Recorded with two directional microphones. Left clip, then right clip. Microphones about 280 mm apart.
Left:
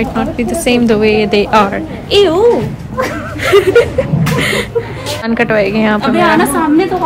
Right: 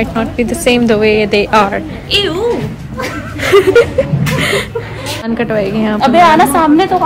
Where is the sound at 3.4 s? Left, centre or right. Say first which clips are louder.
Right 1 dB; centre.